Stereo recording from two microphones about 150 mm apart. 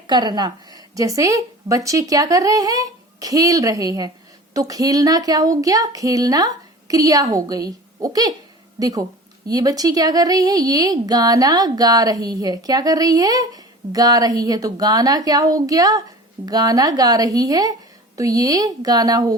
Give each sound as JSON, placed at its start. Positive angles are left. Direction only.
{"t": 0.1, "sound": "speech", "side_deg": -30}